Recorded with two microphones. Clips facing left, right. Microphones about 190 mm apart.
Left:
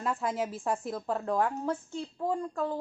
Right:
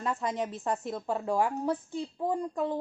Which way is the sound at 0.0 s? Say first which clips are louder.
Even; centre (ahead or behind).